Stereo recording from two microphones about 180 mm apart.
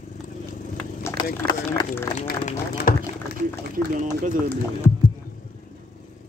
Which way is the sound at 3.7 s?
45° right (ahead or behind).